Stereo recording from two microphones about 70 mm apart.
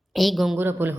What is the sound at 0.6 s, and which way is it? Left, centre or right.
Speech, right.